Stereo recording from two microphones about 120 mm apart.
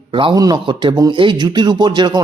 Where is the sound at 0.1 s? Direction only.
40° right (ahead or behind).